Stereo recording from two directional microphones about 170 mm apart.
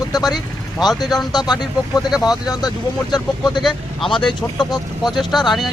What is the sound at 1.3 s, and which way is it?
Speech, 25° left (ahead or behind).